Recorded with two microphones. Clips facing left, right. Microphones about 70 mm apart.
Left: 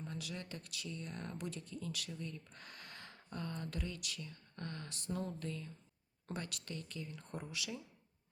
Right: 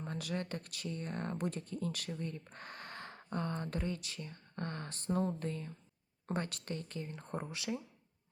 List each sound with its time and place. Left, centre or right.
0.0 s speech: right